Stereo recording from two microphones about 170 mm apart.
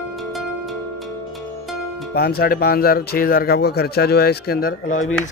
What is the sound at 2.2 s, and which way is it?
Speech, 65° left (ahead or behind).